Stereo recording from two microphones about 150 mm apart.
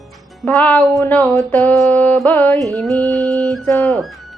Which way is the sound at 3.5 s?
Centre (ahead or behind).